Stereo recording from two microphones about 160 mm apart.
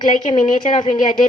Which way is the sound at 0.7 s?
45° left (ahead or behind).